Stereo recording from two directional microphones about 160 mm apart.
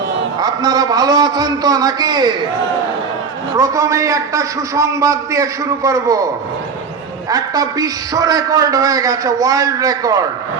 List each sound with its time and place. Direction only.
0.3 s a man's voice: 25° right (ahead or behind)
3.5 s a man's voice: 20° right (ahead or behind)
7.3 s a man's voice: 20° right (ahead or behind)